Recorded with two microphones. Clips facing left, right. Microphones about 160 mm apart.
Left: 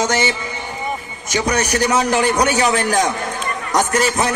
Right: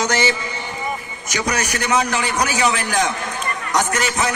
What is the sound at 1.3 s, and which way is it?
A man's voice, 30° left (ahead or behind).